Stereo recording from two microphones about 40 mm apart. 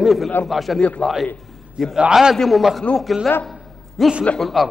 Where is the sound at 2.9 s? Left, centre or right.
Left.